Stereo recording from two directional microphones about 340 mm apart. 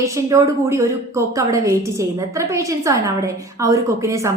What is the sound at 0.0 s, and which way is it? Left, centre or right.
A woman's voice, centre.